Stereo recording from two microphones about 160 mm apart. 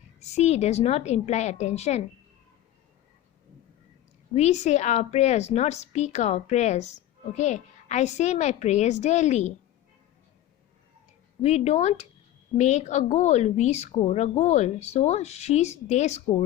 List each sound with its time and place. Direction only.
0.2 s a woman's voice: 45° left (ahead or behind)
4.4 s a woman's voice: 45° left (ahead or behind)
11.4 s a woman's voice: 45° left (ahead or behind)